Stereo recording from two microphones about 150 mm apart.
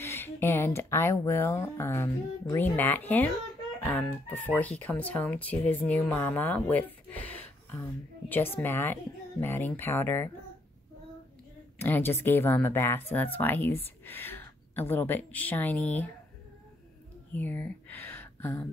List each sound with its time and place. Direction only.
0.0 s speech: 15° left (ahead or behind)
11.8 s speech: 15° left (ahead or behind)
17.3 s speech: 10° left (ahead or behind)